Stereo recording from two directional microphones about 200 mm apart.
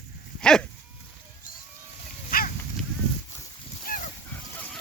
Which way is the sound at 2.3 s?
45° left (ahead or behind).